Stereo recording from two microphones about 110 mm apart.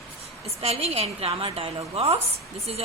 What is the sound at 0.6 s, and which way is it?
A woman's voice, 65° right (ahead or behind).